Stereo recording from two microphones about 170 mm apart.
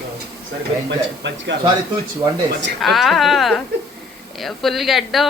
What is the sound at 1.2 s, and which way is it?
Speech, 90° right.